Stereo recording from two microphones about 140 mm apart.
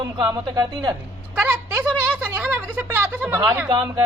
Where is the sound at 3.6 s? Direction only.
30° right (ahead or behind).